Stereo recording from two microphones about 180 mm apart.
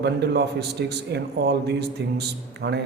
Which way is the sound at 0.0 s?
70° right (ahead or behind).